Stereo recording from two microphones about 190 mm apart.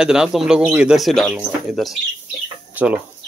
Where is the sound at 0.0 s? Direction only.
5° right (ahead or behind).